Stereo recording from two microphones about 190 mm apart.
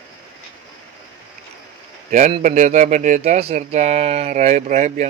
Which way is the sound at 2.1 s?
35° right (ahead or behind).